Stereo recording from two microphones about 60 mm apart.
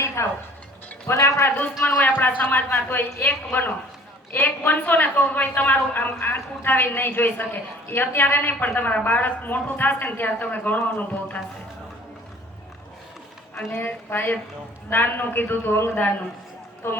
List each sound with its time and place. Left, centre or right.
0.2 s speech: left
2.4 s a man's voice: left
13.7 s a man's voice: left